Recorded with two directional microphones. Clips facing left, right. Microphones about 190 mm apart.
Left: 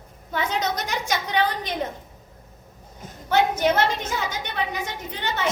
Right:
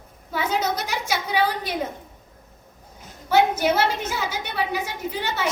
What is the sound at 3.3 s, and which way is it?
A woman's voice, 5° right (ahead or behind).